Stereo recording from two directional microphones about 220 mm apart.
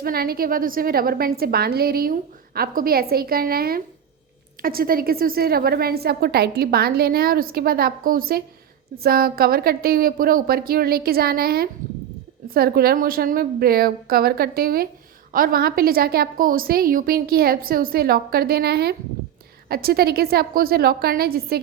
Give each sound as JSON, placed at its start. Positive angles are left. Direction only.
{"t": 0.0, "sound": "a woman's voice", "side_deg": -45}